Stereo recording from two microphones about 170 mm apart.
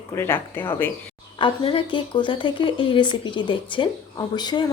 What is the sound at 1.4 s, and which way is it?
Speech, 30° left (ahead or behind).